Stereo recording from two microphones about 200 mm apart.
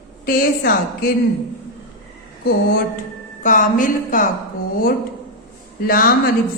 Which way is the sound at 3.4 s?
40° left (ahead or behind).